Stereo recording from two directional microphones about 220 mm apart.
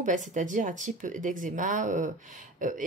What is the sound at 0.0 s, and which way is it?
Speech, 35° right (ahead or behind).